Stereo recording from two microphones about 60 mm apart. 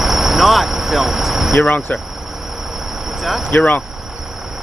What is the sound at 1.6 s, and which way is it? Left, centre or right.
Speech, left.